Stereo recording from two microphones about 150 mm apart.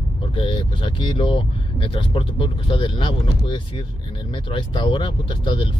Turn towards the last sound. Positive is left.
turn(degrees=35)  # may be behind; listen again after turning